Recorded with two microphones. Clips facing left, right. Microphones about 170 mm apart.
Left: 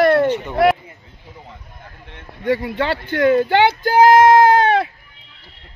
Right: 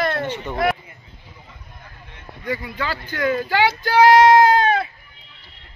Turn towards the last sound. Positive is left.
turn(degrees=60)  # may be behind; listen again after turning